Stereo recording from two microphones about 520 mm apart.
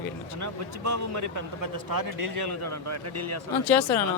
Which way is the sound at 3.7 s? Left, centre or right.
Centre.